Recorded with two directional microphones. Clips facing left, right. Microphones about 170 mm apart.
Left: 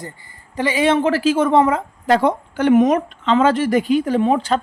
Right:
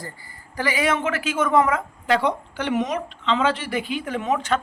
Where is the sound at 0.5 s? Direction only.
25° left (ahead or behind).